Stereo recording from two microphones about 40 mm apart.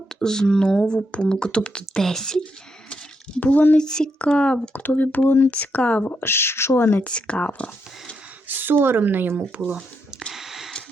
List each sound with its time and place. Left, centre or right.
0.2 s speech: centre
1.9 s speech: centre
3.4 s speech: left
3.8 s speech: centre
4.2 s speech: left
4.7 s speech: left
5.5 s speech: left
6.1 s speech: left
6.9 s speech: left
8.4 s speech: right
10.3 s a sound: centre